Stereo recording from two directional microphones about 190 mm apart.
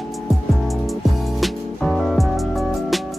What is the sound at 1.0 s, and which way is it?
Music, centre (ahead or behind).